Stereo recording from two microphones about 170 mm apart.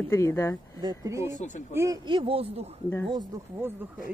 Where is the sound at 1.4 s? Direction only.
45° left (ahead or behind).